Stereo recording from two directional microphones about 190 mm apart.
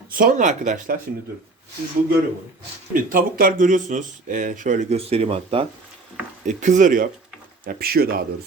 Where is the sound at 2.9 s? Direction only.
50° right (ahead or behind); by 5.6 s 30° right (ahead or behind).